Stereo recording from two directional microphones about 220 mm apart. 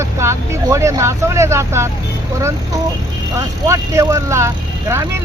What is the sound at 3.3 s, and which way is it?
Speech, 15° right (ahead or behind).